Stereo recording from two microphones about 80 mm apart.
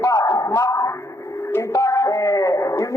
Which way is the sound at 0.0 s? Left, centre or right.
Left.